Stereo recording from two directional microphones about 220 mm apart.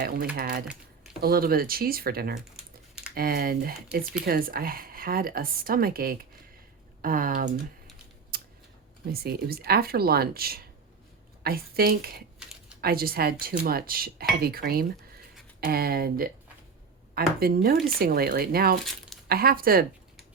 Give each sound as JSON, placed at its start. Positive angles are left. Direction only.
{"t": 0.3, "sound": "speech", "side_deg": -40}
{"t": 8.3, "sound": "a sound", "side_deg": -45}
{"t": 9.1, "sound": "speech", "side_deg": -45}